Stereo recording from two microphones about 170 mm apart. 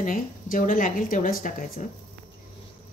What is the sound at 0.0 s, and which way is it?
A woman's voice, 50° left (ahead or behind).